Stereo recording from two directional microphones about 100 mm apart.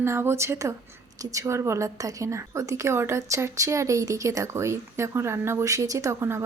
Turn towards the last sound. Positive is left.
turn(degrees=-25)  # may be behind; listen again after turning